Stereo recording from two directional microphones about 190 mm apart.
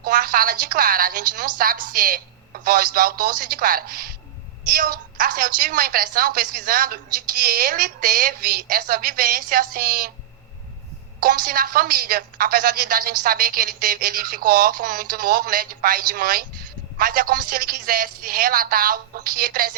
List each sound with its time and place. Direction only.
0.0 s a woman's voice: 50° right (ahead or behind)
11.2 s a woman's voice: 50° right (ahead or behind)